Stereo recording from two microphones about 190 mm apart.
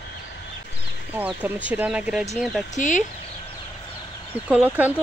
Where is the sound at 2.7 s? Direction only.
40° left (ahead or behind).